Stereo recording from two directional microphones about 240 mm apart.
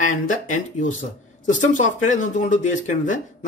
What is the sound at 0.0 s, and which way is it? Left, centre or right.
Speech, left.